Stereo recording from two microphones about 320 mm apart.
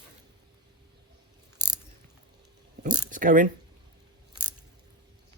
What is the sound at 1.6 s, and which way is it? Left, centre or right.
Ratchet, centre.